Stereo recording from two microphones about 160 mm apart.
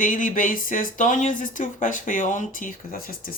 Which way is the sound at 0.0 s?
55° left (ahead or behind).